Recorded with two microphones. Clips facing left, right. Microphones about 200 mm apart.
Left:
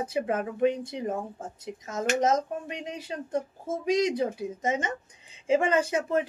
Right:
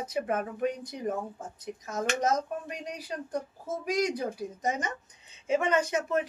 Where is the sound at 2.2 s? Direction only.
25° left (ahead or behind).